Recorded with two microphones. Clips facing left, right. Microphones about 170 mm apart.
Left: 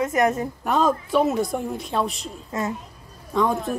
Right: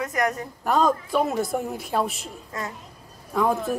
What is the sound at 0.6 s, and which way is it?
Speech, centre (ahead or behind).